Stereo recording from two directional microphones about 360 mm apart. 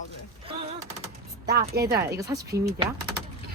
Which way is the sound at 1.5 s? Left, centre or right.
Right.